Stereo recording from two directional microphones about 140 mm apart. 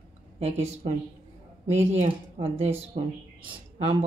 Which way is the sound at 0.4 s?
50° right (ahead or behind).